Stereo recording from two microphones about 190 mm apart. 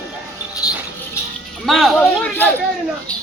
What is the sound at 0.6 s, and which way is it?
Music, 20° left (ahead or behind).